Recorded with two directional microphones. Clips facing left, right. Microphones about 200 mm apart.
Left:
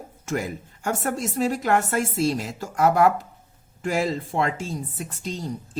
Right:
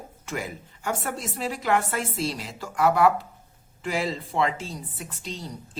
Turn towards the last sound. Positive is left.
turn(degrees=45)  # may be behind; listen again after turning